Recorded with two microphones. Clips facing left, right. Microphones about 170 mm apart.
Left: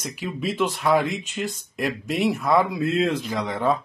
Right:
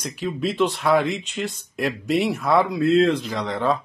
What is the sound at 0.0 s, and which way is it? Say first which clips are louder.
Speech: right 3 dB; centre (ahead or behind).